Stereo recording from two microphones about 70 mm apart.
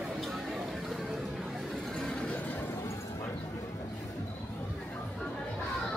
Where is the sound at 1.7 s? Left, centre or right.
Centre.